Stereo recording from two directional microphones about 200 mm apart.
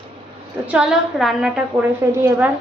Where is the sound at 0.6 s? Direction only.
5° right (ahead or behind).